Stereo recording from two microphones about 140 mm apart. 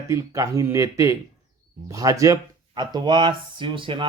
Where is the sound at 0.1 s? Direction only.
20° right (ahead or behind).